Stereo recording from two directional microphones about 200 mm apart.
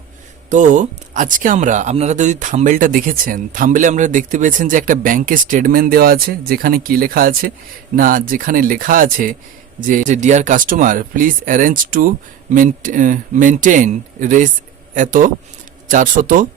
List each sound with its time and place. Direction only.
0.5 s speech: 40° right (ahead or behind)